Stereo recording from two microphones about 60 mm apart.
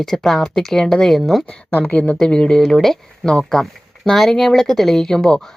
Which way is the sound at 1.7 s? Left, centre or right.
Left.